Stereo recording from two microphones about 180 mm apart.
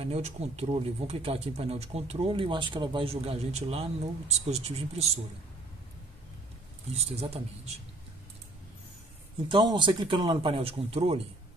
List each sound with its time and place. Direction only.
0.0 s speech: 35° right (ahead or behind)
7.0 s speech: 35° right (ahead or behind)
9.5 s speech: 25° right (ahead or behind)